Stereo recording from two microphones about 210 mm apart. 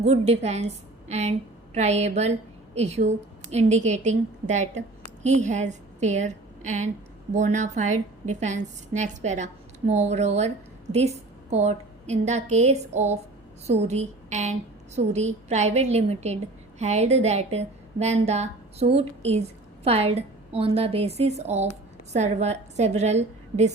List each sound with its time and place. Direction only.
0.0 s a woman's voice: 30° right (ahead or behind)